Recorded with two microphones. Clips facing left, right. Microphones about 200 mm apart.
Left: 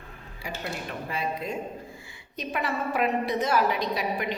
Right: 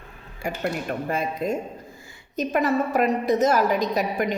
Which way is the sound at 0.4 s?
50° right (ahead or behind).